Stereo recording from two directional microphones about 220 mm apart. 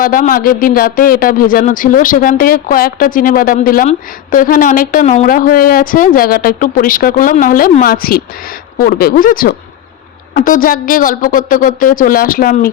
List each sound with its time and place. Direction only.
0.0 s speech: 40° left (ahead or behind)